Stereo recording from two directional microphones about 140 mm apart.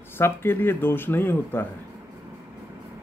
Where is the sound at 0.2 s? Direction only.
15° left (ahead or behind).